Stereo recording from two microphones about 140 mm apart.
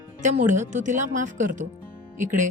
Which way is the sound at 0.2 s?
60° right (ahead or behind).